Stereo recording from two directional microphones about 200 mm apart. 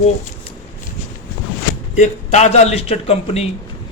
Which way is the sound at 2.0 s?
35° left (ahead or behind).